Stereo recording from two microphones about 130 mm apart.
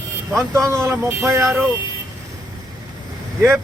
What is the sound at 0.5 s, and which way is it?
Speech, 20° right (ahead or behind).